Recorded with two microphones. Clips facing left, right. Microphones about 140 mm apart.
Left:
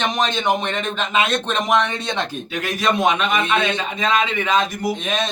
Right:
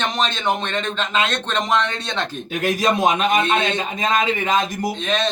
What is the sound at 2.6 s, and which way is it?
A man's voice, 40° right (ahead or behind).